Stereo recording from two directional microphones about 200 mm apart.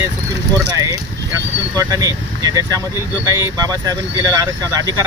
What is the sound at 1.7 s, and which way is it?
Speech, 15° right (ahead or behind).